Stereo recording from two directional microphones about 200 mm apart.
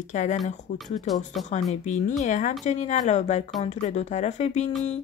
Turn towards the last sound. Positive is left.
turn(degrees=35)  # may be behind; listen again after turning